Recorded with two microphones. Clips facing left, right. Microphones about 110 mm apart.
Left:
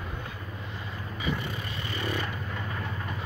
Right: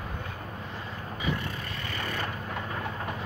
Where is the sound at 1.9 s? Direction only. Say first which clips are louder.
Left 3 dB; 15° left (ahead or behind).